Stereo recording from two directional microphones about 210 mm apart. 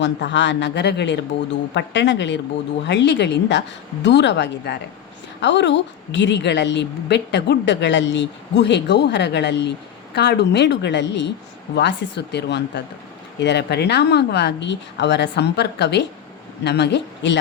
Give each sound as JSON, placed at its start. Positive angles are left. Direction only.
{"t": 0.0, "sound": "a woman's voice", "side_deg": 55}